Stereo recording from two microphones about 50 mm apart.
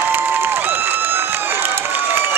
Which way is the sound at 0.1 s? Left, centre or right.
Right.